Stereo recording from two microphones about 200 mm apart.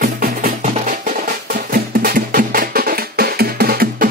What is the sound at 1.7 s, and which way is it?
Music, 45° right (ahead or behind).